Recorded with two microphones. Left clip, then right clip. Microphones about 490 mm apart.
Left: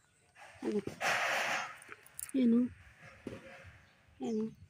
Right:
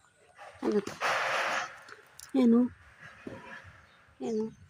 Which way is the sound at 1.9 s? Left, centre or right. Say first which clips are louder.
Right 2 dB; left.